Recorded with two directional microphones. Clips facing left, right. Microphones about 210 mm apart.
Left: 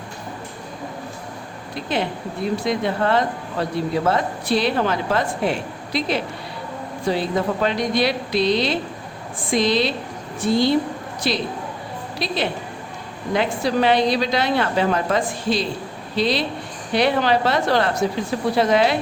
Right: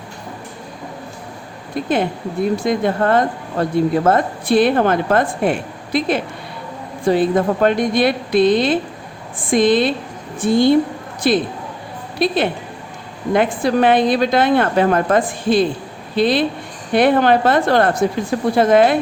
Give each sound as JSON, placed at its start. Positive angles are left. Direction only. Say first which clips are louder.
{"t": 1.7, "sound": "a woman's voice", "louder": "right 5 dB", "side_deg": -50}